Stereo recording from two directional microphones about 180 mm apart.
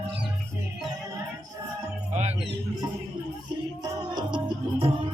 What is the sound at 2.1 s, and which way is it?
Music, 40° right (ahead or behind).